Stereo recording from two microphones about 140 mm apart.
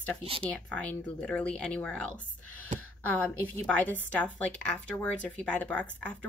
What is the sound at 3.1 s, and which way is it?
Speech, 10° left (ahead or behind).